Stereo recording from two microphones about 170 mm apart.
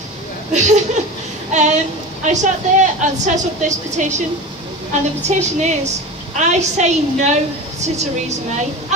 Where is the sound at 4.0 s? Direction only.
45° right (ahead or behind).